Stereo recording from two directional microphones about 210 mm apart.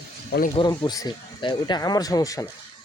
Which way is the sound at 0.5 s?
20° left (ahead or behind).